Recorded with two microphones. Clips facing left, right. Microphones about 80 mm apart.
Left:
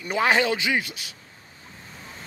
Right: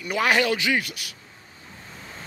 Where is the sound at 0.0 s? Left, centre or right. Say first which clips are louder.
Even; left.